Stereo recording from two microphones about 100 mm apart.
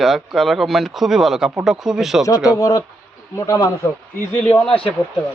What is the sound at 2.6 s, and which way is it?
Speech, 35° left (ahead or behind).